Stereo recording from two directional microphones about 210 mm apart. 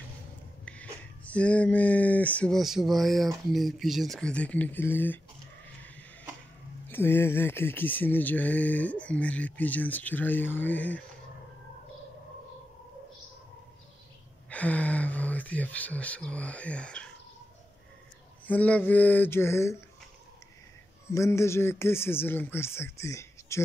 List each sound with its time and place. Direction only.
0.7 s speech: 5° left (ahead or behind)
6.9 s speech: 10° left (ahead or behind)
14.5 s speech: 5° left (ahead or behind)
18.5 s speech: 5° left (ahead or behind)
21.1 s speech: 15° left (ahead or behind)